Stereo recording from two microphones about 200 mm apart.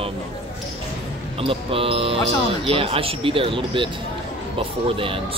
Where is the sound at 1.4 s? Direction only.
25° right (ahead or behind).